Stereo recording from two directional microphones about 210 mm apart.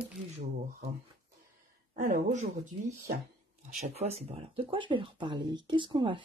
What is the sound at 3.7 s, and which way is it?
Speech, 35° right (ahead or behind).